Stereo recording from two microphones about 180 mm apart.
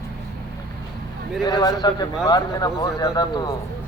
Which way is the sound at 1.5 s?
25° left (ahead or behind).